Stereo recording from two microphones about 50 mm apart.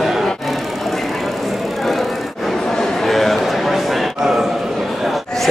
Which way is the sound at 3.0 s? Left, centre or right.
Centre.